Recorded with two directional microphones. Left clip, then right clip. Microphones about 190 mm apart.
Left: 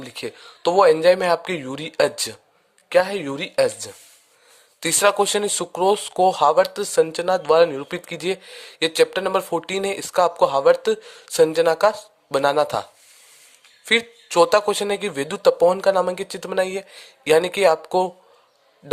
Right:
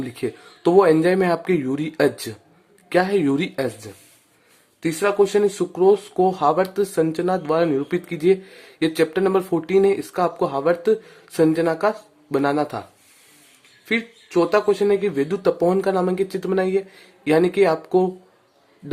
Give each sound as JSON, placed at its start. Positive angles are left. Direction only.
{"t": 0.0, "sound": "speech", "side_deg": 25}
{"t": 13.8, "sound": "speech", "side_deg": 35}